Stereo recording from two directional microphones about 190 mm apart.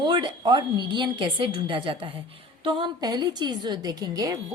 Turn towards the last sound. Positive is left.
turn(degrees=-20)  # may be behind; listen again after turning